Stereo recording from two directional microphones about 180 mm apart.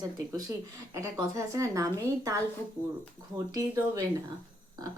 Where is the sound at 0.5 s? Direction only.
15° right (ahead or behind).